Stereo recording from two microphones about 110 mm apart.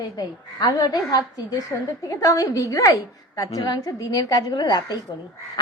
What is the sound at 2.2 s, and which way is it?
A woman's voice, 30° left (ahead or behind).